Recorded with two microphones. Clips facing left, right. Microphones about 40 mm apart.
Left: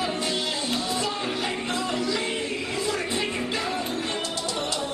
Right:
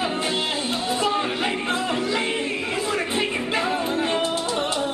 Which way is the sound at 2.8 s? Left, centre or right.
Right.